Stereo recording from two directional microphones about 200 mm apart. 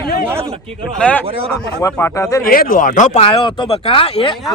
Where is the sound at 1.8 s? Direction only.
15° left (ahead or behind).